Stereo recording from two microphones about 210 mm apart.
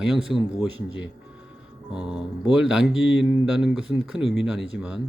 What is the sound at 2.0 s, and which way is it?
Speech, 5° right (ahead or behind).